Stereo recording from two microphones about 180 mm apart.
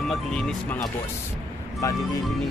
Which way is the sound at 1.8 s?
15° left (ahead or behind).